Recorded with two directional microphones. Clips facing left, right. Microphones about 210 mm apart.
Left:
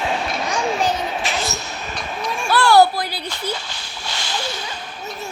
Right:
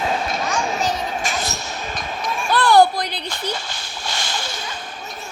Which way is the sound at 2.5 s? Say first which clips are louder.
Left 1 dB; 20° right (ahead or behind).